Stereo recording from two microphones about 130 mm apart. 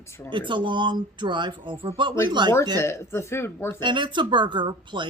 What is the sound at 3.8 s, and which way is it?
Speech, 35° right (ahead or behind).